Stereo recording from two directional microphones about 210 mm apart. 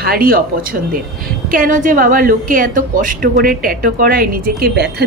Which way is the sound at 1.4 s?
40° right (ahead or behind).